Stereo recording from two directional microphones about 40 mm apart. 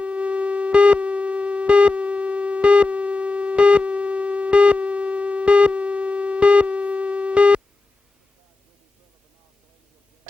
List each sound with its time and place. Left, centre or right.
0.0 s sine wave: right